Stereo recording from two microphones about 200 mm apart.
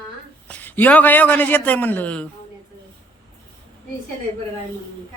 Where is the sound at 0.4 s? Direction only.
10° left (ahead or behind).